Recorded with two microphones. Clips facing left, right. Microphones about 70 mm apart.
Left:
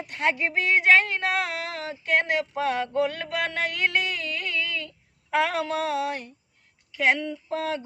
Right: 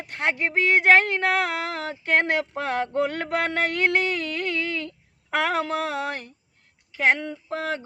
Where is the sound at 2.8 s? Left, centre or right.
Right.